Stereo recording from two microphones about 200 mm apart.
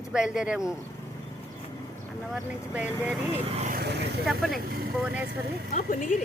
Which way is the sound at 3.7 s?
55° right (ahead or behind).